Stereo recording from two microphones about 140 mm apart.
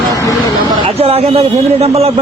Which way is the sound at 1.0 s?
45° right (ahead or behind).